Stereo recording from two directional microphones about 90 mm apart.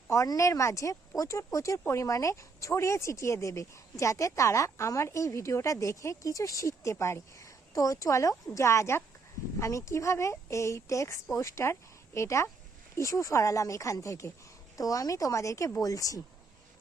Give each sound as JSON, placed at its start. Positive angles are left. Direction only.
{"t": 0.1, "sound": "speech", "side_deg": 35}